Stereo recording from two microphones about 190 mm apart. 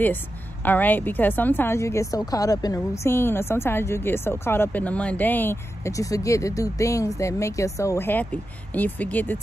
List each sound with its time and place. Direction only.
0.7 s a woman's voice: 10° left (ahead or behind)